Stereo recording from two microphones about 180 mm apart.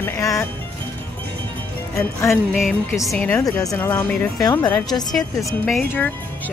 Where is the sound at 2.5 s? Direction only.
5° right (ahead or behind).